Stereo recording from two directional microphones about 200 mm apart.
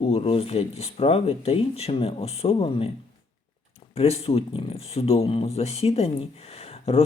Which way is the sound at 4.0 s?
30° left (ahead or behind).